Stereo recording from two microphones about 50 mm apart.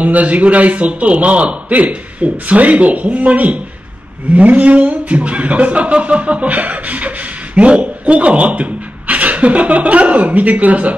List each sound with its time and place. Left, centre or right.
0.0 s speech: right